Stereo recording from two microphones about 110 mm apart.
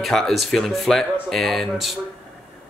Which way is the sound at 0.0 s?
Centre (ahead or behind).